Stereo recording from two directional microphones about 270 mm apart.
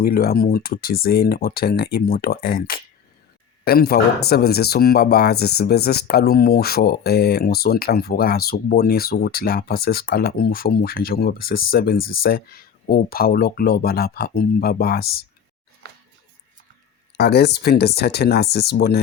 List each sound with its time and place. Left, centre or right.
0.0 s speech: left
11.9 s speech: left
12.2 s speech: left
17.2 s speech: left